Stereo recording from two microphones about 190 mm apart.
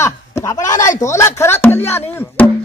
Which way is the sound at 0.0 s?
15° left (ahead or behind).